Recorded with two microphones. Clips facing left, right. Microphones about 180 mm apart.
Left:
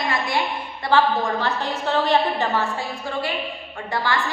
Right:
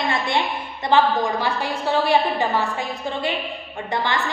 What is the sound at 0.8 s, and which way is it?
A woman's voice, 15° right (ahead or behind).